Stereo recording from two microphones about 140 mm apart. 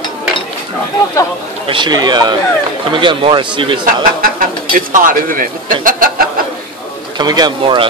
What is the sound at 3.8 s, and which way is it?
Speech, 90° right.